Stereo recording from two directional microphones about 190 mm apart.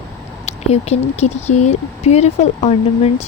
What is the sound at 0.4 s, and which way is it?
Speech, 35° left (ahead or behind).